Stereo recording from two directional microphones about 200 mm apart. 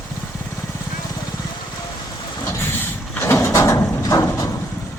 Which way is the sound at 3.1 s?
10° left (ahead or behind).